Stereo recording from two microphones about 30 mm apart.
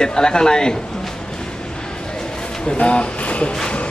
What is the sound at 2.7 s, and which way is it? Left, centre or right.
Speech, left.